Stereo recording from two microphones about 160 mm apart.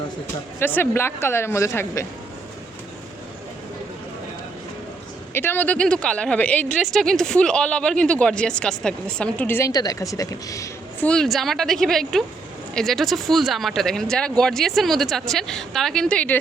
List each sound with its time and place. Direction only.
0.6 s speech: 15° left (ahead or behind)
5.3 s speech: 15° left (ahead or behind)
11.0 s speech: 5° left (ahead or behind)